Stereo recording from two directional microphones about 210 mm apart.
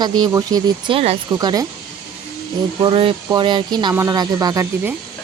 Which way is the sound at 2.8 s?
25° right (ahead or behind).